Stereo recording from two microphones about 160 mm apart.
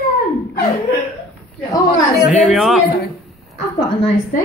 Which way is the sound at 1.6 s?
20° left (ahead or behind).